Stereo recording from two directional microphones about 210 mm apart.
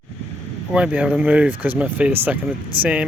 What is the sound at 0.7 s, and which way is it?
Speech, 5° right (ahead or behind).